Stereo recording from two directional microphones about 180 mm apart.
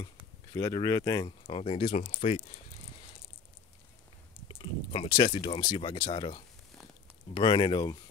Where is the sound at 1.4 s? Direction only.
30° left (ahead or behind).